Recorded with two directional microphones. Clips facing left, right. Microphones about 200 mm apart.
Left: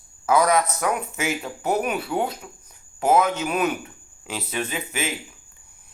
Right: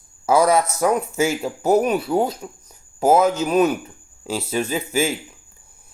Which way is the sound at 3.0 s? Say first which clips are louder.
Right 4 dB; 40° right (ahead or behind).